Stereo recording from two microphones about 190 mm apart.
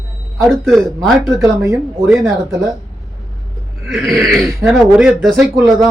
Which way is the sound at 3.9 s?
Centre (ahead or behind).